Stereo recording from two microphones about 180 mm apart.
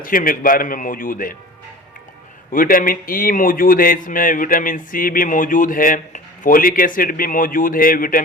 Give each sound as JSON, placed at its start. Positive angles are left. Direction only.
{"t": 0.0, "sound": "speech", "side_deg": 50}
{"t": 2.5, "sound": "speech", "side_deg": 50}